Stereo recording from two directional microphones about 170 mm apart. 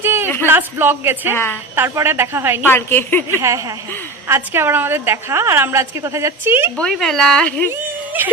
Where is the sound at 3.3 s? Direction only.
15° right (ahead or behind).